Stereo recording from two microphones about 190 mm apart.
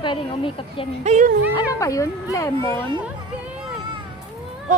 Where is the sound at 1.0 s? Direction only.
40° right (ahead or behind).